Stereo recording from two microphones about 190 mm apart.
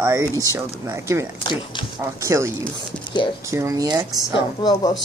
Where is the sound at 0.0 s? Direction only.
15° right (ahead or behind).